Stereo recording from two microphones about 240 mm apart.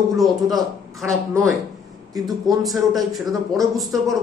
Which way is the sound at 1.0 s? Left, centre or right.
Centre.